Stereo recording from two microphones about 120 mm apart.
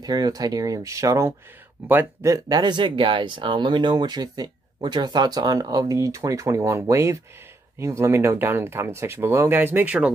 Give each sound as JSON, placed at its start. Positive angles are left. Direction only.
{"t": 0.0, "sound": "speech", "side_deg": -35}